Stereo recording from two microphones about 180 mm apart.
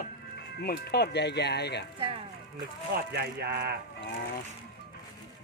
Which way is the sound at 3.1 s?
65° right (ahead or behind).